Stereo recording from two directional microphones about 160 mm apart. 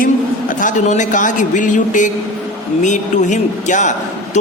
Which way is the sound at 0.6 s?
50° left (ahead or behind).